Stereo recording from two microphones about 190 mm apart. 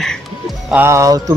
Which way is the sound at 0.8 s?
15° right (ahead or behind).